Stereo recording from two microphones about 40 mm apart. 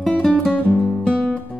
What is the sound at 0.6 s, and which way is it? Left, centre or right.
Music, left.